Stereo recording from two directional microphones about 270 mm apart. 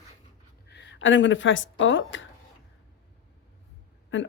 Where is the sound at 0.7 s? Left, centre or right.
Left.